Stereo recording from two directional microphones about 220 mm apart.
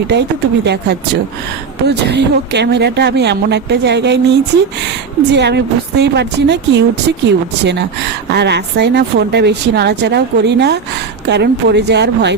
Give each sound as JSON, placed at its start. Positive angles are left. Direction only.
{"t": 0.1, "sound": "speech", "side_deg": -50}
{"t": 5.3, "sound": "speech", "side_deg": -50}